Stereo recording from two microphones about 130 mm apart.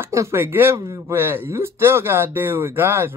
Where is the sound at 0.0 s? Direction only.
20° right (ahead or behind).